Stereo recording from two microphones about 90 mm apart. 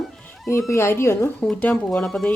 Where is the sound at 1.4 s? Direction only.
15° left (ahead or behind).